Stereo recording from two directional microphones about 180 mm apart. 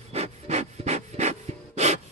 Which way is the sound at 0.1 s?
35° right (ahead or behind).